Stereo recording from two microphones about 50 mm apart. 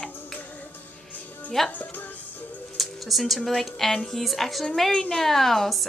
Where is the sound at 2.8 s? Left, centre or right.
Centre.